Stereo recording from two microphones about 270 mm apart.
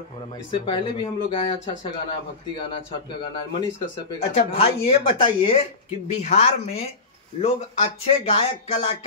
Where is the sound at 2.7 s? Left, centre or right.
Centre.